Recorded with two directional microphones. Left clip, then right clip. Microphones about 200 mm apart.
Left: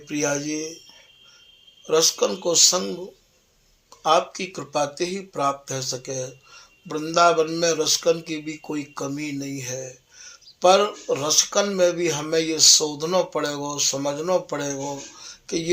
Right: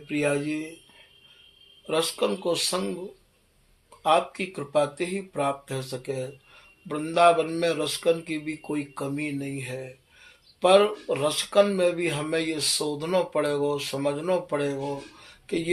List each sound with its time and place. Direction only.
0.1 s speech: 25° left (ahead or behind)
1.9 s speech: 25° left (ahead or behind)
4.0 s speech: 25° left (ahead or behind)